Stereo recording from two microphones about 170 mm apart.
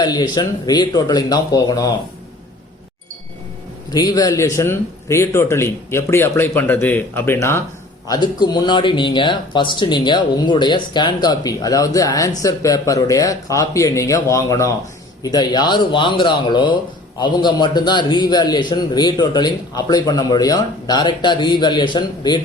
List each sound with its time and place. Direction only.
0.0 s a man's voice: 25° left (ahead or behind)
3.9 s a man's voice: 25° left (ahead or behind)